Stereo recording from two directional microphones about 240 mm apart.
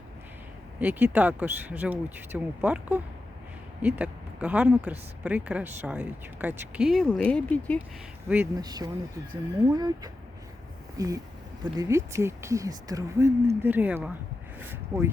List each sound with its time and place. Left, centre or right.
0.8 s speech: centre
8.3 s speech: centre
14.6 s a sound: centre